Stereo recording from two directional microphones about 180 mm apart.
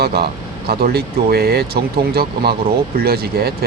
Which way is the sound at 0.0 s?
60° right (ahead or behind).